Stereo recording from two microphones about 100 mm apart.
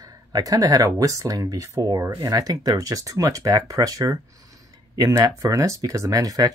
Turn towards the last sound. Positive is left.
turn(degrees=-40)  # may be behind; listen again after turning